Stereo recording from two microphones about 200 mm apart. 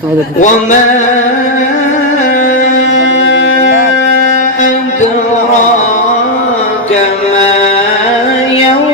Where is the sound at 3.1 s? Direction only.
65° left (ahead or behind).